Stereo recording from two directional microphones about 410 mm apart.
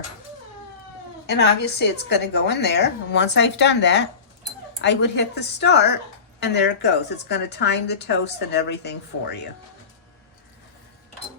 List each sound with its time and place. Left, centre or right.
1.3 s a woman's voice: left